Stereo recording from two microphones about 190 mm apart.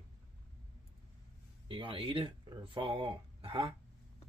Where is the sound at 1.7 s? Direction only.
25° right (ahead or behind).